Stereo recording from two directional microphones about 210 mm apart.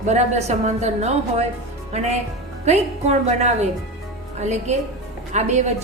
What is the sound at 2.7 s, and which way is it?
A woman's voice, 30° right (ahead or behind).